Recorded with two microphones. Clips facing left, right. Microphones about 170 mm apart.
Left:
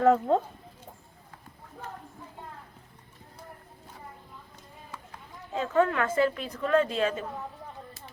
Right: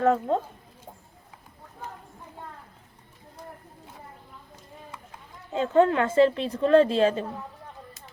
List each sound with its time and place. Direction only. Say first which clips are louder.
0.0 s speech: left 1 dB; centre (ahead or behind)
5.5 s a woman's voice: right 4 dB; 30° right (ahead or behind)